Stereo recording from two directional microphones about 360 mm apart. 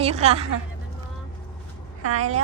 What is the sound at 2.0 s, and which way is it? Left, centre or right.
Speech, right.